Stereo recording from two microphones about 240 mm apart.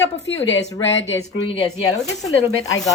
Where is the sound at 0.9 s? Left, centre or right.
Left.